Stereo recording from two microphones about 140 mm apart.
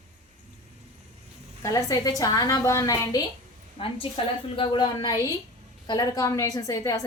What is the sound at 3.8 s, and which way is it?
A woman's voice, 40° left (ahead or behind).